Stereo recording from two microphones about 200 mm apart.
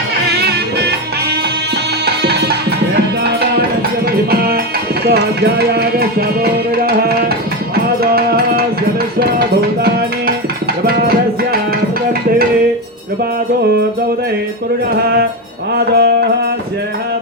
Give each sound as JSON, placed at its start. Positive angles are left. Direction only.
{"t": 0.3, "sound": "music", "side_deg": -55}
{"t": 2.0, "sound": "music", "side_deg": -55}
{"t": 15.7, "sound": "music", "side_deg": -55}